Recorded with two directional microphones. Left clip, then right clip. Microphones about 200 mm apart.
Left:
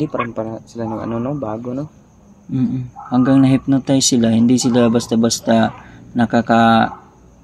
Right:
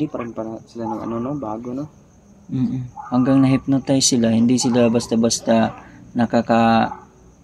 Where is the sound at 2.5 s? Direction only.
10° left (ahead or behind).